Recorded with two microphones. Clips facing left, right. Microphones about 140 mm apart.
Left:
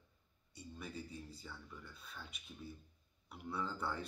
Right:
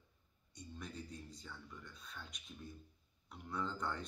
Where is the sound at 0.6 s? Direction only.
5° left (ahead or behind).